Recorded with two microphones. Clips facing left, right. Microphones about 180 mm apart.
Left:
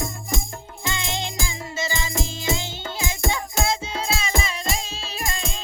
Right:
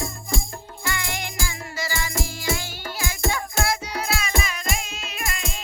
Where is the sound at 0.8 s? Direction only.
20° left (ahead or behind).